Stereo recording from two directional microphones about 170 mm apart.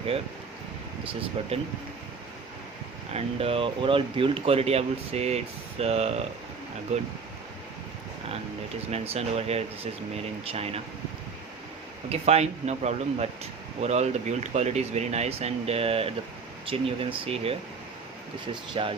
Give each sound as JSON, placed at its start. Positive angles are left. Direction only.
{"t": 1.4, "sound": "speech", "side_deg": -35}
{"t": 3.1, "sound": "speech", "side_deg": -35}
{"t": 8.9, "sound": "speech", "side_deg": -40}
{"t": 12.0, "sound": "speech", "side_deg": -40}
{"t": 18.7, "sound": "speech", "side_deg": -30}